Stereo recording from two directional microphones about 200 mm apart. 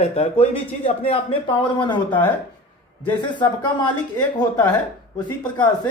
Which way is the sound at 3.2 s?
25° left (ahead or behind).